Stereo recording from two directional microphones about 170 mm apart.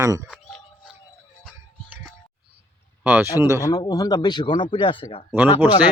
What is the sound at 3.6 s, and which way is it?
A man's voice, 20° left (ahead or behind).